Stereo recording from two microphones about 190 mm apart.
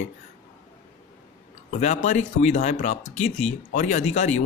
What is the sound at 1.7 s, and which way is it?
A man's voice, 35° left (ahead or behind).